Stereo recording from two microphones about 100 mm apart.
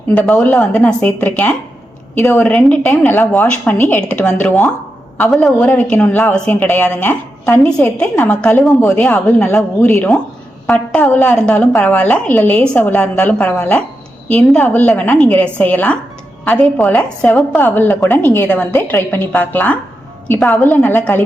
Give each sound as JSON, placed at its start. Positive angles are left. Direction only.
{"t": 0.1, "sound": "a woman's voice", "side_deg": 10}
{"t": 2.4, "sound": "a woman's voice", "side_deg": 15}
{"t": 5.7, "sound": "a woman's voice", "side_deg": 15}